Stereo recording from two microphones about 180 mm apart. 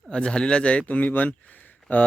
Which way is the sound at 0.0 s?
5° left (ahead or behind).